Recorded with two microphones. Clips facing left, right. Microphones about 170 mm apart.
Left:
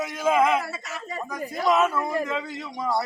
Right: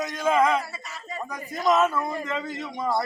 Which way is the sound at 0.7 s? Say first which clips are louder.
Left 5 dB; 80° left.